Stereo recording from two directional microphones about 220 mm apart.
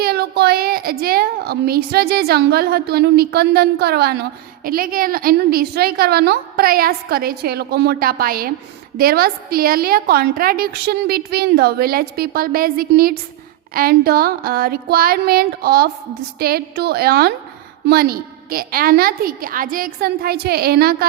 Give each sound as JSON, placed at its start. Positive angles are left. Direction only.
{"t": 0.0, "sound": "a woman's voice", "side_deg": -45}